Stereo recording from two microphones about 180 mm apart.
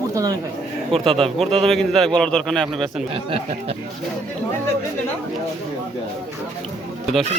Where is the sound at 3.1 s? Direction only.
30° right (ahead or behind).